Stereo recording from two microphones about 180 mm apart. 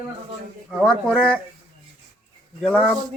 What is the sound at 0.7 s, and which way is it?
Speech, centre (ahead or behind).